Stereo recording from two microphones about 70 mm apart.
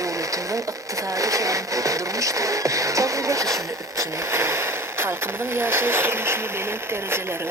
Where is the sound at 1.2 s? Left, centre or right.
Right.